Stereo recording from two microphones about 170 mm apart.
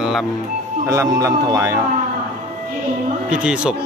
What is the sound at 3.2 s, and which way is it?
Speech, 5° right (ahead or behind).